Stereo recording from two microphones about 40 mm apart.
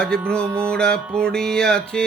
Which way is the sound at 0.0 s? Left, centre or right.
Left.